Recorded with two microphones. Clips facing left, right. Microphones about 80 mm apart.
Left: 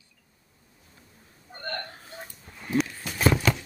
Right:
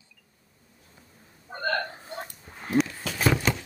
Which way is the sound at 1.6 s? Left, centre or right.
Right.